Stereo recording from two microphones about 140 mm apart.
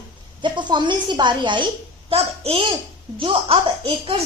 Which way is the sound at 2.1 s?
45° right (ahead or behind).